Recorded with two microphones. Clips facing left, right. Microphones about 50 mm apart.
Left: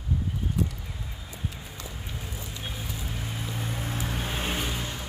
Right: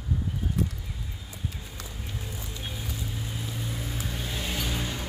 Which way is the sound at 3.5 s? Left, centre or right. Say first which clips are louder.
Left 4 dB; left.